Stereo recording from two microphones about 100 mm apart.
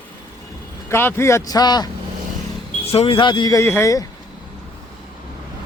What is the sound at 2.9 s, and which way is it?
Speech, 70° left (ahead or behind).